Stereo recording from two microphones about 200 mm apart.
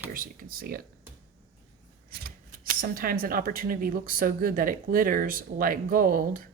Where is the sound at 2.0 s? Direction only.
50° right (ahead or behind).